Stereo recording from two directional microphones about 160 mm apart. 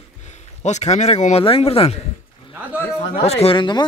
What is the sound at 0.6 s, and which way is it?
Speech, 45° left (ahead or behind).